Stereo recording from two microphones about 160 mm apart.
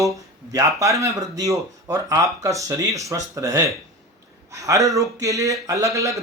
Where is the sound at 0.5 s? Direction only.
20° right (ahead or behind).